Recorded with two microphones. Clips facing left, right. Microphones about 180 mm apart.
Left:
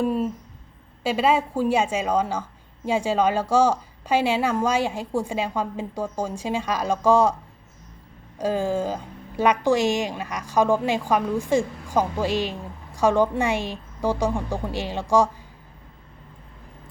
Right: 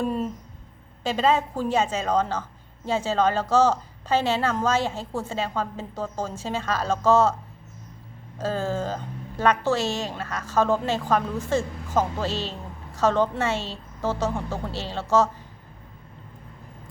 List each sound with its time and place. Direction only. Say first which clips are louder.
0.0 s a sound: left 3 dB; 5° left (ahead or behind)
1.0 s a woman's voice: left 1 dB; 10° left (ahead or behind)
8.4 s a woman's voice: left 3 dB; 15° left (ahead or behind)